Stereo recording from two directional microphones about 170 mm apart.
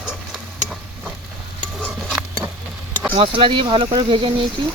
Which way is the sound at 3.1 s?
30° right (ahead or behind).